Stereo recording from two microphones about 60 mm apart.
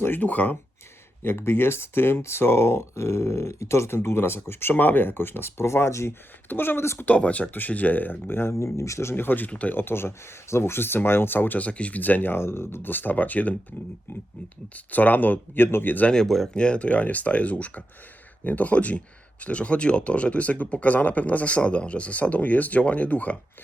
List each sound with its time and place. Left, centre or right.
0.0 s speech: left
1.2 s speech: left
6.5 s speech: left
7.0 s speech: left
9.7 s speech: left
14.8 s speech: left
16.0 s speech: centre
16.6 s speech: centre